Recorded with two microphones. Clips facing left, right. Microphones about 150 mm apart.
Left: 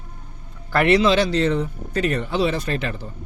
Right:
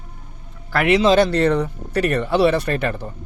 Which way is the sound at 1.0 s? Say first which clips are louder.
Right 3 dB; 50° right (ahead or behind).